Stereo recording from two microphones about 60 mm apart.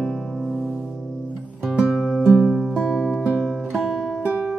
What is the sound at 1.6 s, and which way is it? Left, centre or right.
Music, centre.